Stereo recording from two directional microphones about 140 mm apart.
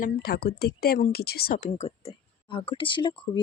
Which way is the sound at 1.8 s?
45° left (ahead or behind).